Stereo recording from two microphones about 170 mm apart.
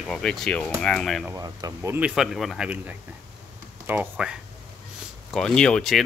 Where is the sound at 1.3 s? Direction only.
20° right (ahead or behind).